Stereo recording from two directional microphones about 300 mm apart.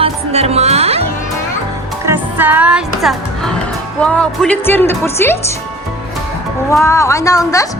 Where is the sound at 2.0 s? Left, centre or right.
Centre.